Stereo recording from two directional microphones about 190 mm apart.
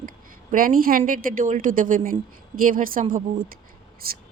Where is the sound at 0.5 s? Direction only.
50° right (ahead or behind).